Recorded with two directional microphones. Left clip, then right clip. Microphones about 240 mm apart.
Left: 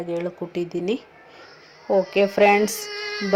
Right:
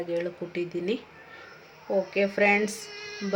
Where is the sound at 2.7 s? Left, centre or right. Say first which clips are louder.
Left 9 dB; left.